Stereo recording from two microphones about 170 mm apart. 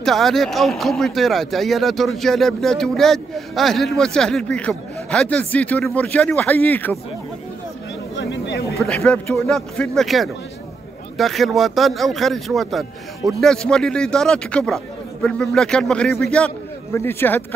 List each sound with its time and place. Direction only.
0.0 s speech: centre (ahead or behind)
8.2 s a sound: 85° left
8.7 s speech: 5° left (ahead or behind)